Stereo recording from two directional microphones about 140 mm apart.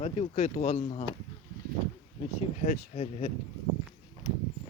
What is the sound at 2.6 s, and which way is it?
Speech, 60° left (ahead or behind).